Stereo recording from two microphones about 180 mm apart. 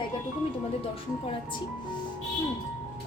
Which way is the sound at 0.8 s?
30° left (ahead or behind).